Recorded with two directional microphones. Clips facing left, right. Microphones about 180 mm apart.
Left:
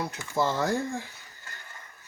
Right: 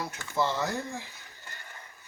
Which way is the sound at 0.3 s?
45° left (ahead or behind).